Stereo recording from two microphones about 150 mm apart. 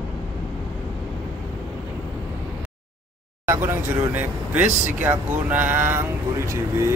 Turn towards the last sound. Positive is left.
turn(degrees=-15)  # may be behind; listen again after turning